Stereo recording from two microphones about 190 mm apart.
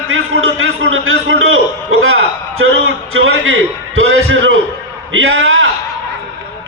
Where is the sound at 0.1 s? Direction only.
90° right.